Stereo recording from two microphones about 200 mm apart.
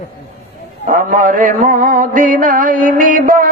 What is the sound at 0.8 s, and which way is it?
Mantra, 40° right (ahead or behind).